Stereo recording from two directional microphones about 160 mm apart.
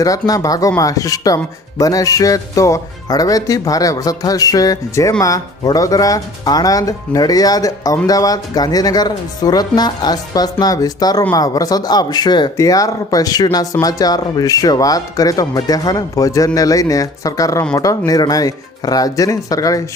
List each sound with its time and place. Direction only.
0.0 s speech: 20° left (ahead or behind)